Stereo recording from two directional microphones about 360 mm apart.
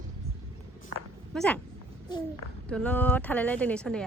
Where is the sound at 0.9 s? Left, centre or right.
Right.